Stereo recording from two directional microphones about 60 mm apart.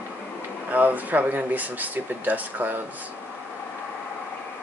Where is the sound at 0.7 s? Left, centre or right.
Right.